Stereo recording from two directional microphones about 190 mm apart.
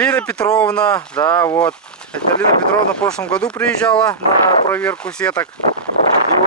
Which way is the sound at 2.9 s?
5° left (ahead or behind).